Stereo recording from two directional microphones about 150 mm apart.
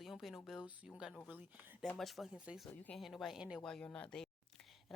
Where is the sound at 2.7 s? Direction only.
10° left (ahead or behind).